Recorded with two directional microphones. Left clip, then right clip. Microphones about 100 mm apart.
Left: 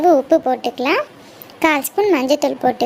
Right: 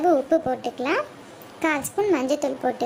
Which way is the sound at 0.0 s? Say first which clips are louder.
Left 7 dB; 30° left (ahead or behind).